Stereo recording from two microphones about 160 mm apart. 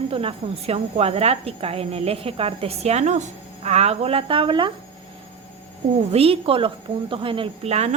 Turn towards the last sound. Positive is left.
turn(degrees=-40)  # may be behind; listen again after turning